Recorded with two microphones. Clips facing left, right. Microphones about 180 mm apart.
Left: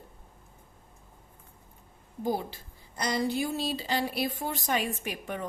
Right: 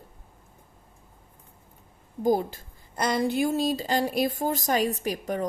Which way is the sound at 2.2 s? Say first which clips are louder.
Right 7 dB; 45° right (ahead or behind).